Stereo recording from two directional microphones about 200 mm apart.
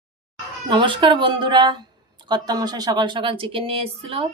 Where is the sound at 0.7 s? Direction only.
25° right (ahead or behind).